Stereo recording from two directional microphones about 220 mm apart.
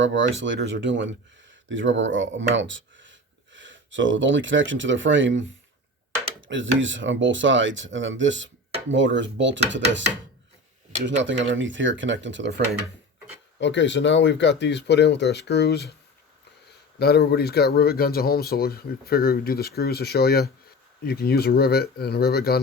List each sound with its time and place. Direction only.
0.0 s speech: 55° right (ahead or behind)
6.5 s speech: 60° right (ahead or behind)
11.0 s speech: 55° right (ahead or behind)
13.6 s speech: 55° left (ahead or behind)
17.0 s speech: 45° left (ahead or behind)